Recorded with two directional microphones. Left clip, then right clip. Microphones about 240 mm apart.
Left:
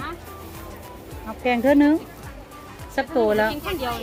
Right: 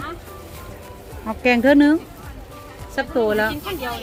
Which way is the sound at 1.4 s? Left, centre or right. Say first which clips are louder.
Right 3 dB; centre.